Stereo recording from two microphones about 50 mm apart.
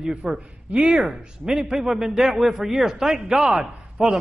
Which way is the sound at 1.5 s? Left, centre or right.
Centre.